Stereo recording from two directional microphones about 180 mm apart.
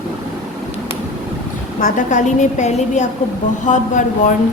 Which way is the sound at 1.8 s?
45° left (ahead or behind).